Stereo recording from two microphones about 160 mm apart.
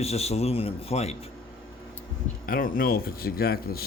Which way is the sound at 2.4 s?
65° left (ahead or behind).